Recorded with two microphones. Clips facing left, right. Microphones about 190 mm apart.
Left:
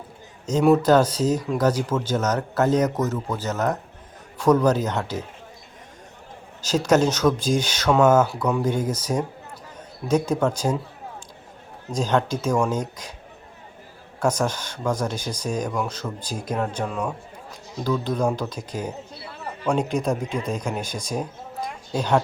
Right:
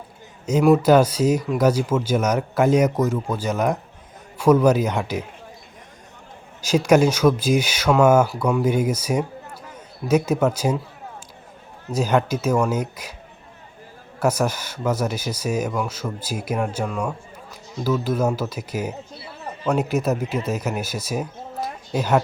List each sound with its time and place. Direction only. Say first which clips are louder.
0.4 s a man's voice: right 2 dB; 10° right (ahead or behind)
6.6 s speech: right 3 dB; 10° right (ahead or behind)
11.9 s speech: right 2 dB; 10° right (ahead or behind)
14.2 s speech: right 2 dB; 10° right (ahead or behind)